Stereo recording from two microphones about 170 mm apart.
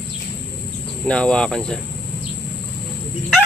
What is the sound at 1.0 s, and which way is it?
Speech, 5° left (ahead or behind).